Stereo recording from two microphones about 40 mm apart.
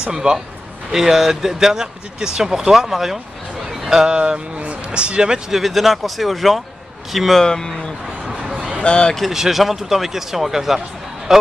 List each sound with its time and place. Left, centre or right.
0.1 s a man's voice: centre
0.9 s speech: centre
4.6 s a sound: right
5.5 s speech: centre
7.3 s speech: centre
8.3 s a sound: centre
8.8 s speech: left
9.3 s speech: centre